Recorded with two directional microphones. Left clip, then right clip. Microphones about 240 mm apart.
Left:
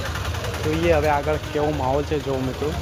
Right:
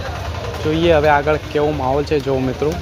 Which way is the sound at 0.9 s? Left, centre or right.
Centre.